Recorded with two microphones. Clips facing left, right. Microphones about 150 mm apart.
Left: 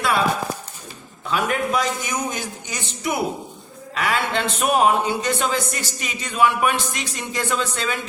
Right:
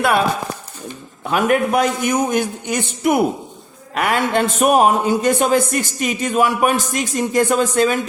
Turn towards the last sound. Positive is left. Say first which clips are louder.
# right 9 dB
turn(degrees=-45)  # may be behind; listen again after turning